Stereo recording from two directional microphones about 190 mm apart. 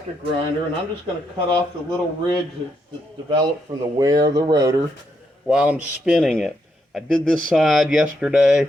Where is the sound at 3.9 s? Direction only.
20° right (ahead or behind).